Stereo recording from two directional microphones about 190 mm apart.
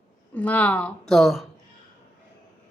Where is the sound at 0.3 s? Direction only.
10° left (ahead or behind).